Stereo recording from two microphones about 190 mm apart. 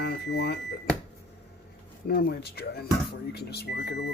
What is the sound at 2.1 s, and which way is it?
Speech, 55° left (ahead or behind).